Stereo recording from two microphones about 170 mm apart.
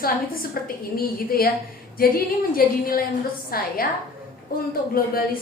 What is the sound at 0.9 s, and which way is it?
A woman's voice, 60° left (ahead or behind).